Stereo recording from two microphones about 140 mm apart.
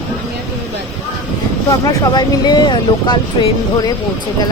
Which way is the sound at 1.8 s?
30° left (ahead or behind).